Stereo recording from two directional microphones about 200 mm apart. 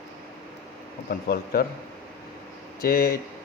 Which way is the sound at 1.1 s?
50° left (ahead or behind).